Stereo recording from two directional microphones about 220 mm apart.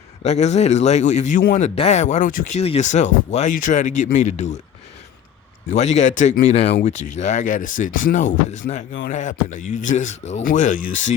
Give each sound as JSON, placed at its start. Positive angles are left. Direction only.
{"t": 0.2, "sound": "a man's voice", "side_deg": 30}
{"t": 5.6, "sound": "a man's voice", "side_deg": 30}